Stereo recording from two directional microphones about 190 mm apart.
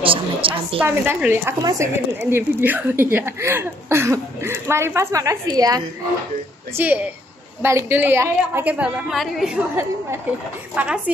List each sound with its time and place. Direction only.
0.0 s a woman's voice: 30° right (ahead or behind)
0.7 s a woman's voice: 10° right (ahead or behind)
6.8 s a woman's voice: 10° right (ahead or behind)
10.7 s a woman's voice: 5° right (ahead or behind)